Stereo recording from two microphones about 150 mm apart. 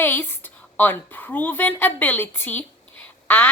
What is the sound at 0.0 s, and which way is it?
A woman's voice, 15° left (ahead or behind).